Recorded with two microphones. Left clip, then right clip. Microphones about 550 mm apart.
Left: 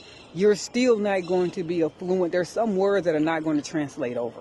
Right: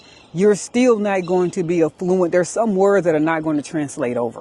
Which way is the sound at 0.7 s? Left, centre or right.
Right.